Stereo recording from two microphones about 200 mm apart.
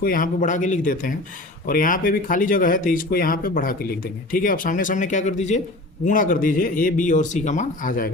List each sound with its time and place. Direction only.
0.0 s speech: 45° left (ahead or behind)